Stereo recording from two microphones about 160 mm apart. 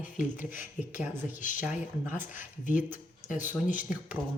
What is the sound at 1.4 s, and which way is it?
Speech, 55° left (ahead or behind).